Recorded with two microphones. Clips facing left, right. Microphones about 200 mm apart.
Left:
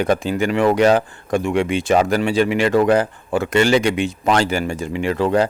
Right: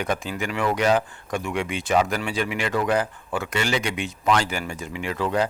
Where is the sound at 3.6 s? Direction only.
80° left.